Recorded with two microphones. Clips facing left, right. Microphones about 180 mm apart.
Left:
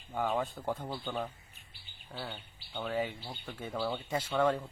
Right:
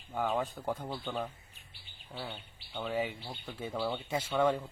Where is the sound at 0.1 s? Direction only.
Centre (ahead or behind).